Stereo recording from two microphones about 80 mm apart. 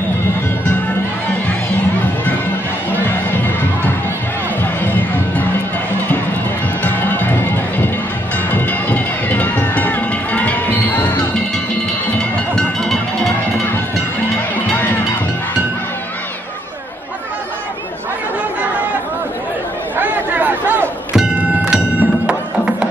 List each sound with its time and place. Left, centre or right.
6.8 s music: left
12.2 s music: centre
14.7 s music: left
20.0 s a sound: right
21.6 s music: centre